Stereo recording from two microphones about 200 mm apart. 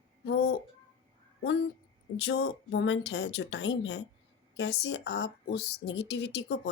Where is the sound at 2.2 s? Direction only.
60° left (ahead or behind).